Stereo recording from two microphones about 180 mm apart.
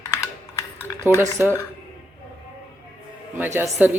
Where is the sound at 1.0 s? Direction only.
15° right (ahead or behind).